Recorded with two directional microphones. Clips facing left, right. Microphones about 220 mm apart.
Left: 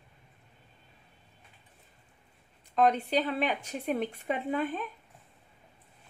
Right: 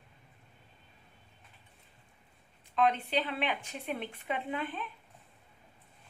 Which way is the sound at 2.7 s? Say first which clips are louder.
Left 4 dB; 40° left (ahead or behind).